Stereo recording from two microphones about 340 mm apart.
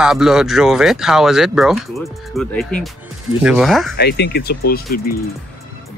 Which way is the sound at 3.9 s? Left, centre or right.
Left.